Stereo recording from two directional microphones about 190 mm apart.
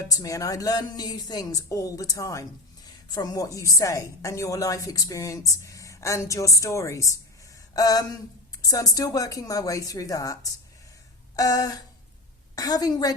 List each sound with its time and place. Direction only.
0.0 s a woman's voice: 20° left (ahead or behind)
7.7 s a sound: 20° left (ahead or behind)
8.6 s a woman's voice: 20° left (ahead or behind)